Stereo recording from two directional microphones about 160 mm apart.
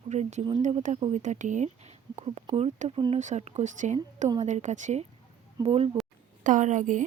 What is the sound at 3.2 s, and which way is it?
Speech, 45° right (ahead or behind).